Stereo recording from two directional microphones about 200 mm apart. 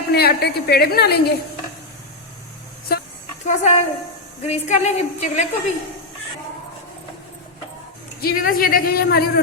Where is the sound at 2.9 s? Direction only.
50° left (ahead or behind).